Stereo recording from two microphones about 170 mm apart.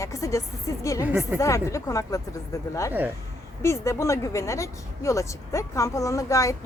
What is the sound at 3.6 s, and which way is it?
A woman's voice, 15° left (ahead or behind).